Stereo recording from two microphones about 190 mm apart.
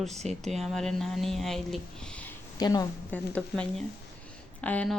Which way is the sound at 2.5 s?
20° left (ahead or behind).